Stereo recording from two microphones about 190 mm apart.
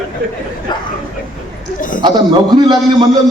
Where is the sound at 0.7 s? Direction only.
25° left (ahead or behind).